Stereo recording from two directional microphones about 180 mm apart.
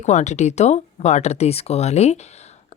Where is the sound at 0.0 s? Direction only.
40° left (ahead or behind).